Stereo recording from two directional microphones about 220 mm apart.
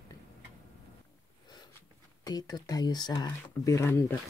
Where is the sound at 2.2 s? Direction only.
20° left (ahead or behind).